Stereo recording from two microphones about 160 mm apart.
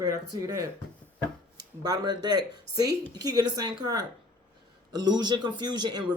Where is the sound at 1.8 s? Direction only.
25° right (ahead or behind).